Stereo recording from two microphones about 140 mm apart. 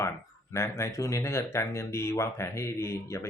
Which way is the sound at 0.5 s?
20° left (ahead or behind).